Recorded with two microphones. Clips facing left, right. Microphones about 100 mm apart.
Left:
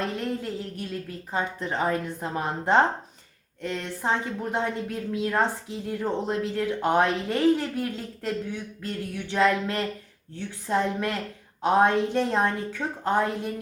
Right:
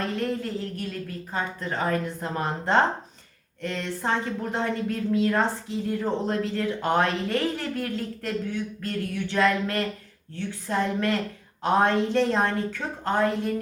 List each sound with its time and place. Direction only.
0.2 s speech: 15° left (ahead or behind)